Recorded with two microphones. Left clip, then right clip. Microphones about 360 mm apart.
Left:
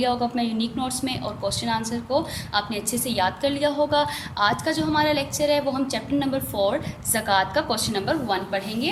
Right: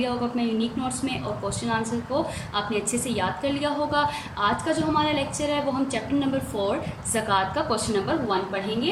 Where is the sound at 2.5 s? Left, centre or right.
Left.